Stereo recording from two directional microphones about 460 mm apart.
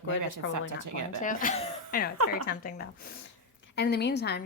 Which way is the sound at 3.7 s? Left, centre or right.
Left.